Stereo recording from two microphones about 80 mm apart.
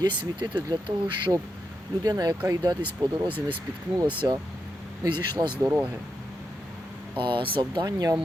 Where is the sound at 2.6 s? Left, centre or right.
Right.